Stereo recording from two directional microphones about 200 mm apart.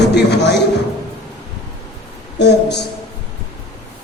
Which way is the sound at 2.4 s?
55° left (ahead or behind).